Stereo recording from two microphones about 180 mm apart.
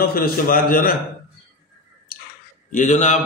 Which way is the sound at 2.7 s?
40° left (ahead or behind).